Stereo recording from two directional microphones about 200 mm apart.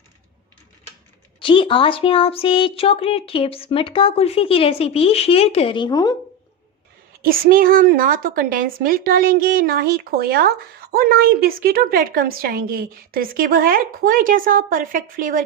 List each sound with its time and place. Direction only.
1.4 s speech: 25° left (ahead or behind)
7.2 s a woman's voice: 45° right (ahead or behind)